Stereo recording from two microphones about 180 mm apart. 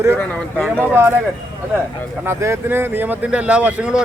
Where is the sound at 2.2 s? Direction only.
15° right (ahead or behind).